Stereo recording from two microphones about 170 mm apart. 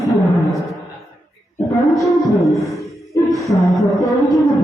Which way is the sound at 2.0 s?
Centre (ahead or behind).